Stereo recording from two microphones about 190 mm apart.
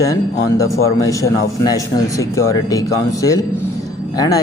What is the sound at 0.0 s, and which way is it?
A man's voice, 15° left (ahead or behind).